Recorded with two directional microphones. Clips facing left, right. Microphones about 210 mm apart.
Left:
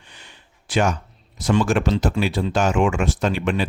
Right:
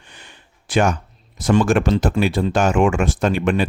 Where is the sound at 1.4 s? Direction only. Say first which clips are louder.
Right 3 dB; 50° right (ahead or behind).